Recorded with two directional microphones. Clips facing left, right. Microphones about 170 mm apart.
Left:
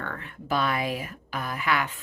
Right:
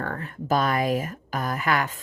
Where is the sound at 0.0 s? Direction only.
40° right (ahead or behind).